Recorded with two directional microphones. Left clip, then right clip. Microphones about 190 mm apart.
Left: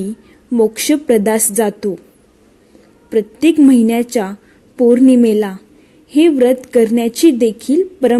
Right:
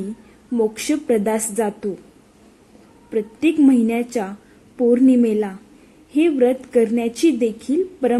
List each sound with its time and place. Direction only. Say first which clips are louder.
0.5 s a woman's voice: left 7 dB; 40° left (ahead or behind)
3.1 s a woman's voice: left 7 dB; 45° left (ahead or behind)